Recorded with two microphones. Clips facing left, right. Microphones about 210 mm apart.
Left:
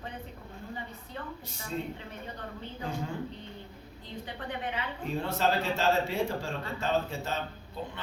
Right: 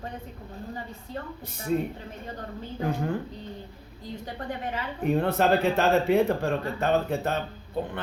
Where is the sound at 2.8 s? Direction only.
60° right (ahead or behind).